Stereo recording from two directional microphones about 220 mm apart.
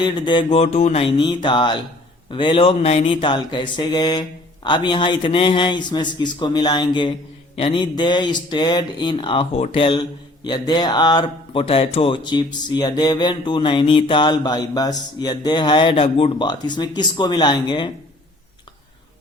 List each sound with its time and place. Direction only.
0.0 s speech: 20° left (ahead or behind)